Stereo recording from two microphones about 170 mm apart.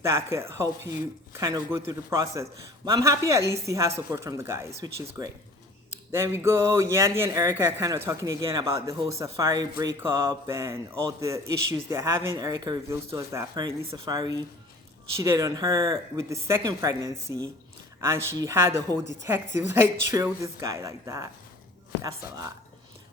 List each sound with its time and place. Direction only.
0.0 s speech: 15° right (ahead or behind)